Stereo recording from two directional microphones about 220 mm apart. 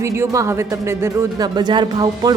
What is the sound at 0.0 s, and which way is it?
A woman's voice, 15° right (ahead or behind).